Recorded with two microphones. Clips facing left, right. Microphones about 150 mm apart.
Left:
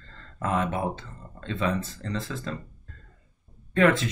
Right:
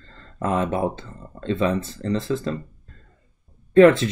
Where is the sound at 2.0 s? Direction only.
30° right (ahead or behind).